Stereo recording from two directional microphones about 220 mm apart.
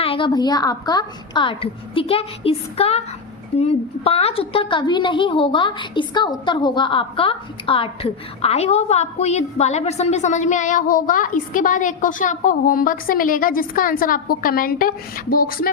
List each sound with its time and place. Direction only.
0.0 s a woman's voice: 25° left (ahead or behind); by 15.7 s 40° left (ahead or behind)